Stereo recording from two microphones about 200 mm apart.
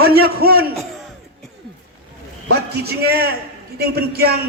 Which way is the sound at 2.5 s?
50° right (ahead or behind).